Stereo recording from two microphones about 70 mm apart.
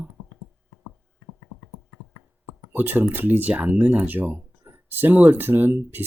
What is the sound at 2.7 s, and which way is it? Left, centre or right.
Speech, right.